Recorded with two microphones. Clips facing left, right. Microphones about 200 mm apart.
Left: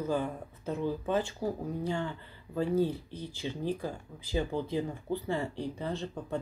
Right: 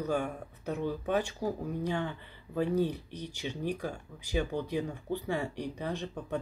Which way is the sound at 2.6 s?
15° right (ahead or behind).